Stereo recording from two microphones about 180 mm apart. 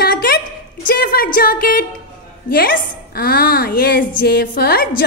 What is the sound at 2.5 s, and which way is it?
A woman's voice, 55° left (ahead or behind).